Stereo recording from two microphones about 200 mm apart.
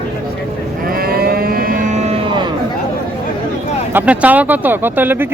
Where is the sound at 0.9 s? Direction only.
50° right (ahead or behind); by 2.5 s 25° right (ahead or behind).